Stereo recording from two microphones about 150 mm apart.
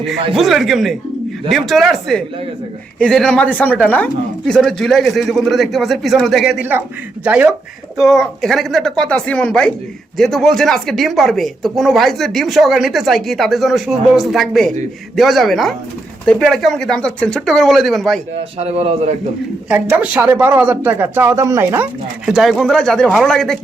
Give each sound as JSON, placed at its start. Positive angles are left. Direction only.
{"t": 0.3, "sound": "speech", "side_deg": 0}
{"t": 18.3, "sound": "a man's voice", "side_deg": -40}
{"t": 19.6, "sound": "speech", "side_deg": -10}
{"t": 22.3, "sound": "speech", "side_deg": 0}